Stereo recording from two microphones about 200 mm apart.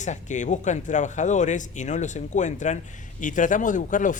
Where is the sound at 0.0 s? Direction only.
35° left (ahead or behind).